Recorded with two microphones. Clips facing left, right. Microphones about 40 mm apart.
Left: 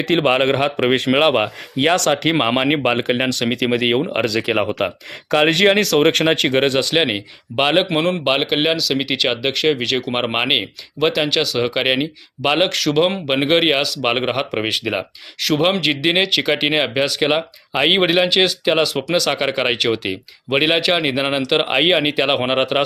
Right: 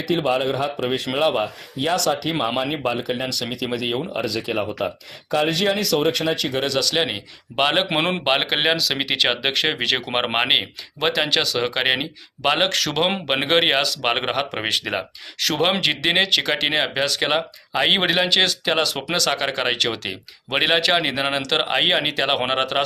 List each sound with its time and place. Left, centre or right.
0.0 s speech: left
4.1 s speech: left
5.3 s speech: left
7.5 s speech: centre